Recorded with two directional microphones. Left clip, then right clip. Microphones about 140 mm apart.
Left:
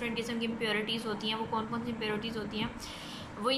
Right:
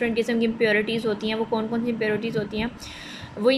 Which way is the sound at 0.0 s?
50° right (ahead or behind).